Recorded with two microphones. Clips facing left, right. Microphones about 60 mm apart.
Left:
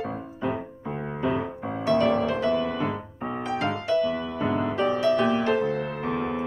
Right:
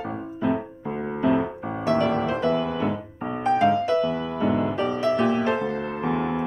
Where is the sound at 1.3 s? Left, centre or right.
Right.